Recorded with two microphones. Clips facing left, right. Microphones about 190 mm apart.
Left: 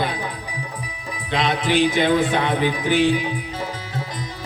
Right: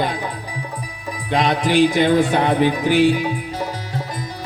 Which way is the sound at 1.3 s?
40° right (ahead or behind).